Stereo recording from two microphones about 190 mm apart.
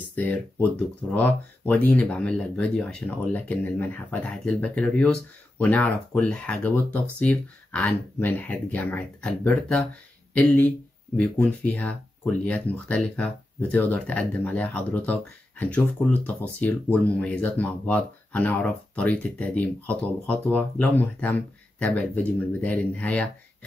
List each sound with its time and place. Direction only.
0.1 s speech: 10° left (ahead or behind)